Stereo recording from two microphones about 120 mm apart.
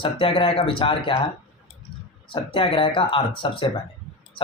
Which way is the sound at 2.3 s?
45° left (ahead or behind).